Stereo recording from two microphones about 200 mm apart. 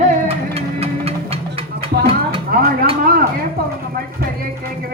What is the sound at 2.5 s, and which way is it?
Speech, 50° right (ahead or behind).